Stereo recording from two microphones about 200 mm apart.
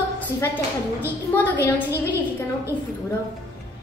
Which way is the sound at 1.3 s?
10° left (ahead or behind).